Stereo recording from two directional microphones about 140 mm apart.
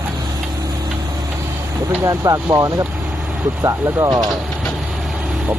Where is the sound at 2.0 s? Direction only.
25° right (ahead or behind).